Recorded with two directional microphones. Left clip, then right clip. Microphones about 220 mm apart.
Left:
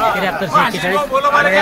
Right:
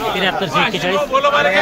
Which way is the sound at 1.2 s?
30° left (ahead or behind).